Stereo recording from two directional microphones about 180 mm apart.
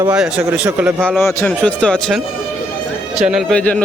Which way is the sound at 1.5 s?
5° left (ahead or behind).